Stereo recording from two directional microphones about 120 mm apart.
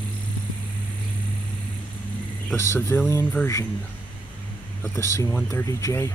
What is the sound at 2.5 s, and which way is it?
Speech, 20° left (ahead or behind).